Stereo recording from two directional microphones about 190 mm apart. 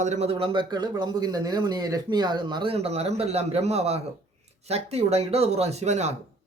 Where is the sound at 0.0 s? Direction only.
35° right (ahead or behind).